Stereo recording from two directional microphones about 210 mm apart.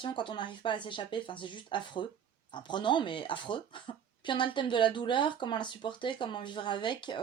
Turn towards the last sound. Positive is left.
turn(degrees=20)  # may be behind; listen again after turning